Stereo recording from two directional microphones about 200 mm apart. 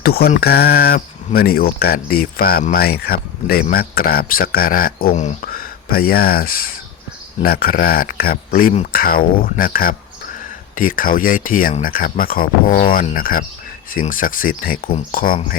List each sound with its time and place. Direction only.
0.0 s speech: 50° left (ahead or behind)